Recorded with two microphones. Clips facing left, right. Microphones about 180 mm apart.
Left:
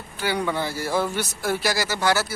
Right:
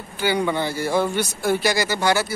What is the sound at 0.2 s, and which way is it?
Speech, centre (ahead or behind).